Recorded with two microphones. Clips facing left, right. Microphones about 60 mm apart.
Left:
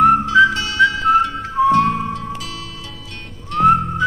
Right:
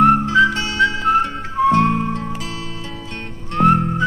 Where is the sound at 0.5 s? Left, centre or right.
Right.